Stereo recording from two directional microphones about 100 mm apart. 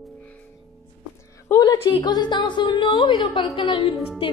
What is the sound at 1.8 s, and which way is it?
A woman's voice, 50° left (ahead or behind).